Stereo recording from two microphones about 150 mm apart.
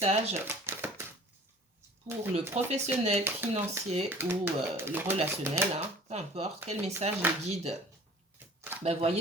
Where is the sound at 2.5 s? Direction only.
45° right (ahead or behind).